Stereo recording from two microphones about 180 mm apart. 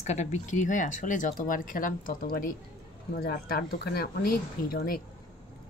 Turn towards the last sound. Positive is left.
turn(degrees=55)  # may be behind; listen again after turning